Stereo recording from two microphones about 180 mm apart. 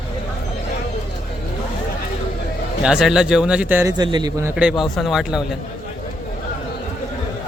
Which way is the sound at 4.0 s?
25° right (ahead or behind).